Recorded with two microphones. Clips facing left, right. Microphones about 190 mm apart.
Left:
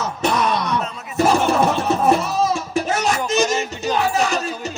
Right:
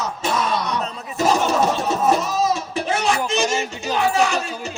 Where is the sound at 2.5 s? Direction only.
45° left (ahead or behind).